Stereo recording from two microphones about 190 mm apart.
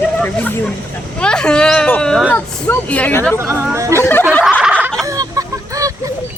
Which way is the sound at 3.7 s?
15° right (ahead or behind).